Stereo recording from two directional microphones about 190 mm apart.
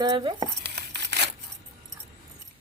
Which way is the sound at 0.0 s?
25° right (ahead or behind).